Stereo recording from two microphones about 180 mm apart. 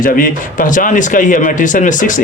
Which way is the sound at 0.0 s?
50° left (ahead or behind).